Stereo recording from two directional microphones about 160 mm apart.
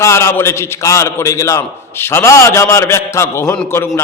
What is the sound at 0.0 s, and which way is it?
A man's voice, 15° left (ahead or behind).